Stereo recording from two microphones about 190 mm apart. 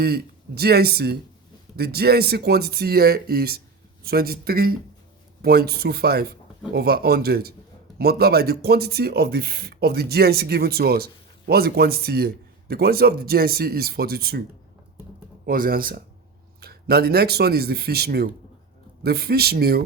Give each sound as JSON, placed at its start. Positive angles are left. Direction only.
{"t": 0.0, "sound": "speech", "side_deg": -55}
{"t": 15.4, "sound": "speech", "side_deg": -50}